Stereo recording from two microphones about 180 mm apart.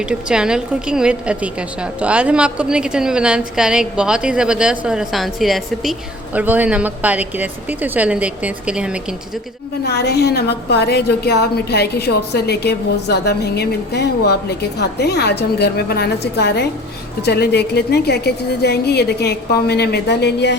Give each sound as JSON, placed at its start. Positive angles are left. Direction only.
{"t": 0.0, "sound": "a woman's voice", "side_deg": -5}
{"t": 9.8, "sound": "a woman's voice", "side_deg": 65}